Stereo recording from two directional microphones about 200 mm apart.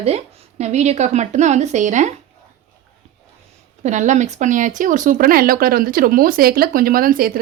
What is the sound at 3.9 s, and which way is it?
Speech, 35° right (ahead or behind).